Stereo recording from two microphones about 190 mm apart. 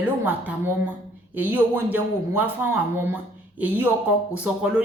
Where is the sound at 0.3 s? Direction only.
10° right (ahead or behind).